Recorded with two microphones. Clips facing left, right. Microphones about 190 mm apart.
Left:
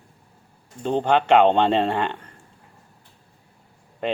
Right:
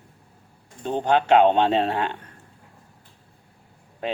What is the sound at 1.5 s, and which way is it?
Speech, 5° right (ahead or behind).